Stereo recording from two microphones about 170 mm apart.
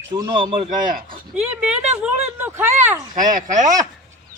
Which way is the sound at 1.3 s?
5° right (ahead or behind).